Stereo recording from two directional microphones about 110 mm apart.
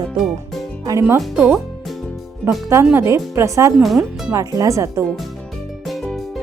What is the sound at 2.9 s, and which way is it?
Speech, 25° right (ahead or behind).